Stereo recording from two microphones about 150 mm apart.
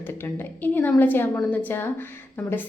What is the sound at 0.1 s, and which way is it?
A woman's voice, 15° left (ahead or behind).